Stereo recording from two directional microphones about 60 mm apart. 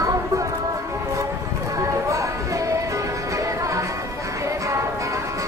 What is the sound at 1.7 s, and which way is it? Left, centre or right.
Music, right.